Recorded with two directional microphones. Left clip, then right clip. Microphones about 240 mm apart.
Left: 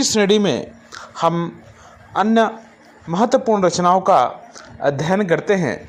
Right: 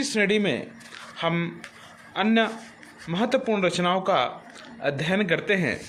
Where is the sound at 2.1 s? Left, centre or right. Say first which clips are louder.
Left 7 dB; centre.